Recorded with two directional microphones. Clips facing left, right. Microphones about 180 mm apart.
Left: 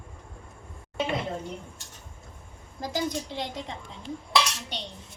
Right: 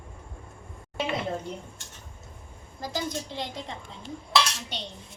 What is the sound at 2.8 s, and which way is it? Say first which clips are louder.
Speech: left 2 dB; 15° left (ahead or behind).